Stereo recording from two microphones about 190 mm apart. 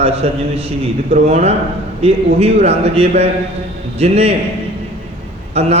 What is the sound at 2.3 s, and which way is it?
Speech, 30° right (ahead or behind).